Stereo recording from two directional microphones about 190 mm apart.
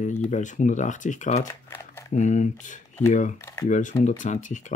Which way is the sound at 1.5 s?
10° left (ahead or behind).